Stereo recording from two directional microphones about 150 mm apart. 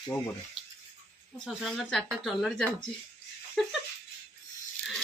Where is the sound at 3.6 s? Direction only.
Centre (ahead or behind).